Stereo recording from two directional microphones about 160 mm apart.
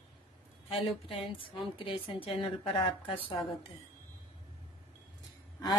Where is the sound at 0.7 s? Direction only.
35° left (ahead or behind).